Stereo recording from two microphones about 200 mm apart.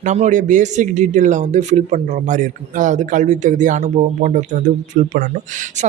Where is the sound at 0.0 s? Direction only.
35° right (ahead or behind).